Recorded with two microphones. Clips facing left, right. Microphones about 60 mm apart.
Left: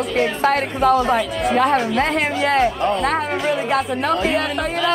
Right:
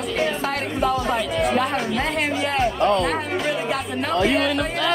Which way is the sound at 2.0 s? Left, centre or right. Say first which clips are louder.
Left 4 dB; left.